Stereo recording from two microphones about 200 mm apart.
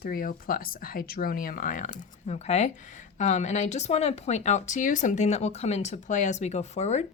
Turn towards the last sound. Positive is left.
turn(degrees=35)  # may be behind; listen again after turning